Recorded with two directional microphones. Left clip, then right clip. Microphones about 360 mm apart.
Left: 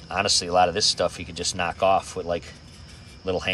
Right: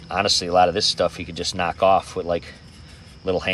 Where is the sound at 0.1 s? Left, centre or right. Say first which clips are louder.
Right 3 dB; centre.